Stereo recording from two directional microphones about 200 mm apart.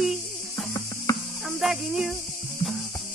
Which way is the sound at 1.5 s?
Centre (ahead or behind).